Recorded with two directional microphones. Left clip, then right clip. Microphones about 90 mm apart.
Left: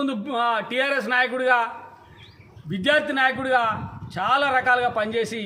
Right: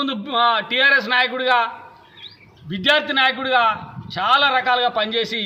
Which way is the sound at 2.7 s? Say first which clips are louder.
Right 3 dB; 25° left (ahead or behind).